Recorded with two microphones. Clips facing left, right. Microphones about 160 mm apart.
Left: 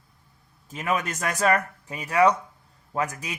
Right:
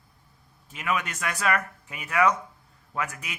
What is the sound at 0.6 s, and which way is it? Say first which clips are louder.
A man's voice: left 3 dB; 40° left (ahead or behind).